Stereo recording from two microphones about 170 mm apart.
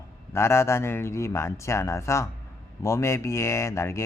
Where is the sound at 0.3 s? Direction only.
15° left (ahead or behind).